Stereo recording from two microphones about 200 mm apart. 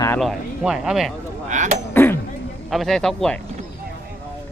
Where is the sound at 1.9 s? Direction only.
10° left (ahead or behind).